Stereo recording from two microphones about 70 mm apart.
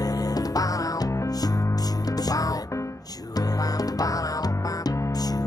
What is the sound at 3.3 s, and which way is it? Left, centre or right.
Music, left.